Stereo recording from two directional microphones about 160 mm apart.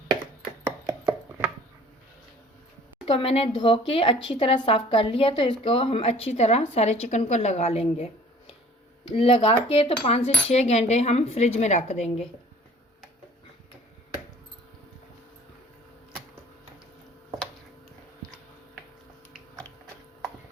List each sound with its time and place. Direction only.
3.1 s speech: 35° left (ahead or behind)